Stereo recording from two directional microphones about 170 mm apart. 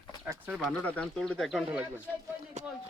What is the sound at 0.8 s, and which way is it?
Speech, 5° left (ahead or behind).